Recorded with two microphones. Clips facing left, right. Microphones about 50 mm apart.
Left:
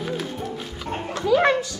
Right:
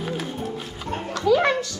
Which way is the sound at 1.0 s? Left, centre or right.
Left.